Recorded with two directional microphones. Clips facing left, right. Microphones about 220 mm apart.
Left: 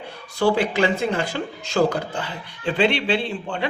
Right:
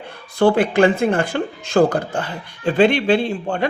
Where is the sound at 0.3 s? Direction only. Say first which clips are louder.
Right 4 dB; 55° right (ahead or behind).